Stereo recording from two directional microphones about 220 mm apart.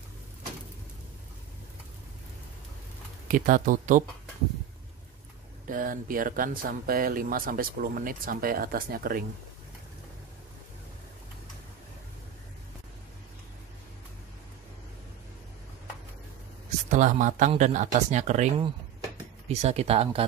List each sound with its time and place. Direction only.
3.3 s speech: 40° right (ahead or behind)
5.7 s speech: 40° right (ahead or behind)
16.9 s speech: 35° right (ahead or behind)